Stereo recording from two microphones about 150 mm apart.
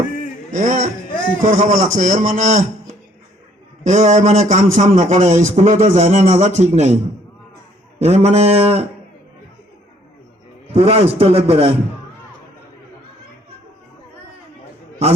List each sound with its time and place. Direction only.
0.5 s a man's voice: 55° right (ahead or behind)
3.8 s a man's voice: 55° right (ahead or behind)
7.9 s a man's voice: 45° right (ahead or behind)
10.8 s a man's voice: 45° right (ahead or behind)